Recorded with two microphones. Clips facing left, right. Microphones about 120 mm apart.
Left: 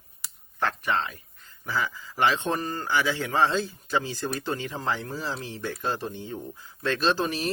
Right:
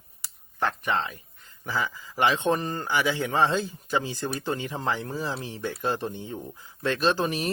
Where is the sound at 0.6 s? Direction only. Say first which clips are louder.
Even; 15° right (ahead or behind).